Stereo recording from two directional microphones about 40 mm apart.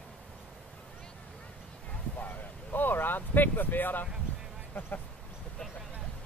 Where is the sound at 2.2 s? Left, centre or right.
Left.